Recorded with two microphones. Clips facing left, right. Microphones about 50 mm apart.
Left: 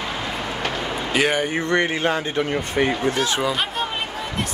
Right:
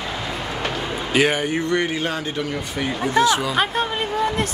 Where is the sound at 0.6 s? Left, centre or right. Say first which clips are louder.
Right 1 dB; left.